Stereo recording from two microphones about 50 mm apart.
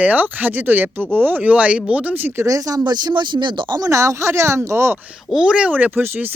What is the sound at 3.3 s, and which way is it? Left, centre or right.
Speech, right.